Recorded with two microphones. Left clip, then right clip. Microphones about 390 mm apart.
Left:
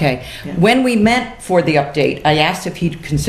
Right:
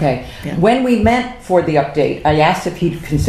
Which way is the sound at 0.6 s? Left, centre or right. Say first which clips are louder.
Even; left.